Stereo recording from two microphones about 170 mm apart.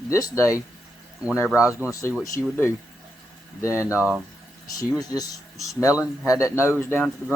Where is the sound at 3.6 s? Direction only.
15° left (ahead or behind).